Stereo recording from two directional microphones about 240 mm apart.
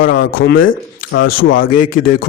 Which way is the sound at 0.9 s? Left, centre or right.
Left.